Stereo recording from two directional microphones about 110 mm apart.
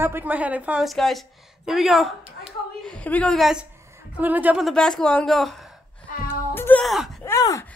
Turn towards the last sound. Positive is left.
turn(degrees=25)  # may be behind; listen again after turning